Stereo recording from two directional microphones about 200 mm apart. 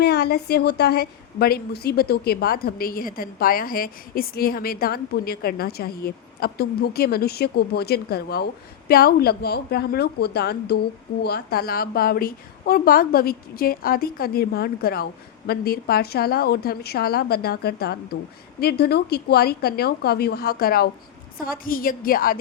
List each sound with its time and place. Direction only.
0.0 s a woman's voice: 55° left (ahead or behind)